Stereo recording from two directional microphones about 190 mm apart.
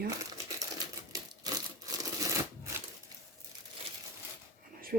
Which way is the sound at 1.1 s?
20° right (ahead or behind).